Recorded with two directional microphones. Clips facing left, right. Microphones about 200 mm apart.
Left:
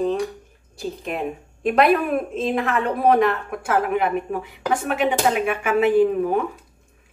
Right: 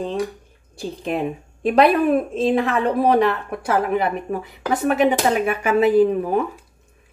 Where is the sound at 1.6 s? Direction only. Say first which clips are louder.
Right 2 dB; 30° right (ahead or behind).